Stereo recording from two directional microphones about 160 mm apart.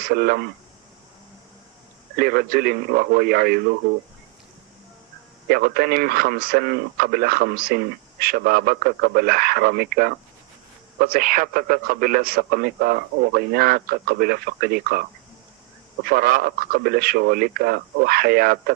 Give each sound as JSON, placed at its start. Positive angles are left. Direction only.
{"t": 0.0, "sound": "speech", "side_deg": -70}
{"t": 2.1, "sound": "a man's voice", "side_deg": -75}
{"t": 5.5, "sound": "a man's voice", "side_deg": -70}
{"t": 11.0, "sound": "a man's voice", "side_deg": -60}
{"t": 16.0, "sound": "a man's voice", "side_deg": -65}